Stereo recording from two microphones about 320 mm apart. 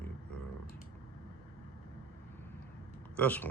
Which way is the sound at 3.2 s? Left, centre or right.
Centre.